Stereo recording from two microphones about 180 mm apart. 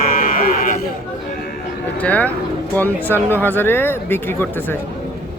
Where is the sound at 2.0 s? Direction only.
10° left (ahead or behind).